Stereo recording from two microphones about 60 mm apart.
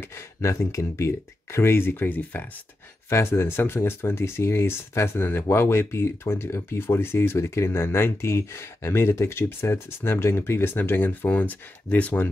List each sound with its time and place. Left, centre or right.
0.0 s speech: left
3.1 s speech: left